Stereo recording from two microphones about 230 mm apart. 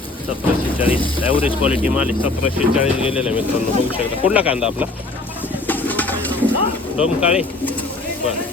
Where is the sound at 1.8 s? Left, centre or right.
Centre.